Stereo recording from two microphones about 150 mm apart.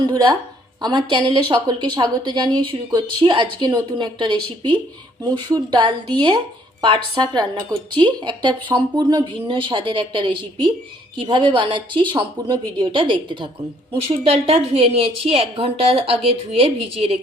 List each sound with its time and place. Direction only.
0.0 s a woman's voice: 30° right (ahead or behind)